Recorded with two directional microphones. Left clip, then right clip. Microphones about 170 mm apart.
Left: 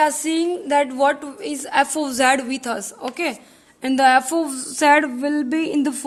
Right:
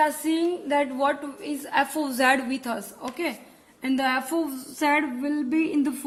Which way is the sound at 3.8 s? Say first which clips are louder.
Left 10 dB; 60° left (ahead or behind).